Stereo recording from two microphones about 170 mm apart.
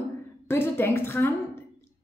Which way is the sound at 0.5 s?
15° left (ahead or behind).